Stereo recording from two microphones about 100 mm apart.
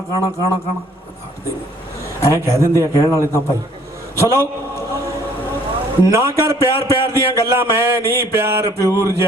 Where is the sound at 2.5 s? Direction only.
30° left (ahead or behind).